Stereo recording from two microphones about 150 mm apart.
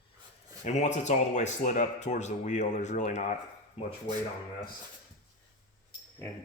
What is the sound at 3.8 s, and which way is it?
Speech, 45° left (ahead or behind).